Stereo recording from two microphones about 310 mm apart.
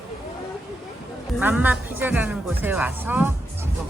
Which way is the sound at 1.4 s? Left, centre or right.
Centre.